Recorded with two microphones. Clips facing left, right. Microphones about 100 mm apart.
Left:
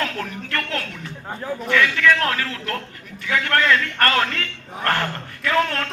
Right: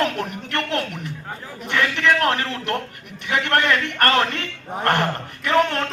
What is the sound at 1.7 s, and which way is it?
A man's voice, 30° right (ahead or behind).